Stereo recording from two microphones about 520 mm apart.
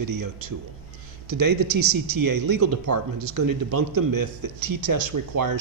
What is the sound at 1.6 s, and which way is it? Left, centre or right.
Speech, right.